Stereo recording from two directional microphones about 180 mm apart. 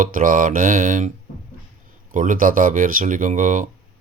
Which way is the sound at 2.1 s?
45° right (ahead or behind).